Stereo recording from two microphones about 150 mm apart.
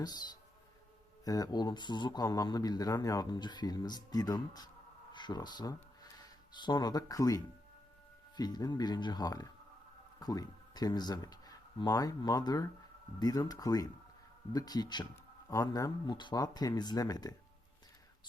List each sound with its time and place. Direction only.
0.0 s speech: 25° left (ahead or behind)